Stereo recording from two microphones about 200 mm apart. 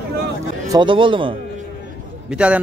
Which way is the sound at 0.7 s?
25° right (ahead or behind).